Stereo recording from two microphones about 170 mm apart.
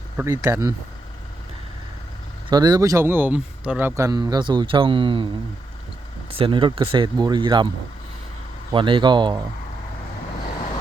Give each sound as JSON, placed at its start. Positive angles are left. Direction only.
{"t": 0.2, "sound": "speech", "side_deg": -15}
{"t": 2.5, "sound": "speech", "side_deg": -25}
{"t": 6.4, "sound": "speech", "side_deg": -30}
{"t": 8.7, "sound": "speech", "side_deg": -30}